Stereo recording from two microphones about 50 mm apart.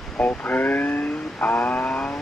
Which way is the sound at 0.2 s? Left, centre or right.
Left.